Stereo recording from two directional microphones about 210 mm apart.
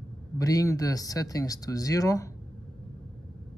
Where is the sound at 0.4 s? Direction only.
15° left (ahead or behind).